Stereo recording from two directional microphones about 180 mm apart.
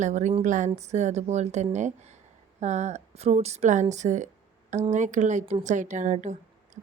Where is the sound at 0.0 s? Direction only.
40° right (ahead or behind).